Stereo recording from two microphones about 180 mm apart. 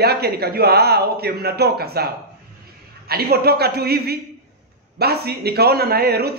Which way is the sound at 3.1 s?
60° right (ahead or behind).